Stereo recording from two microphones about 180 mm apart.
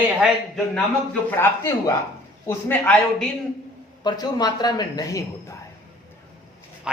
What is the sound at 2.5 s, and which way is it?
Speech, 10° left (ahead or behind).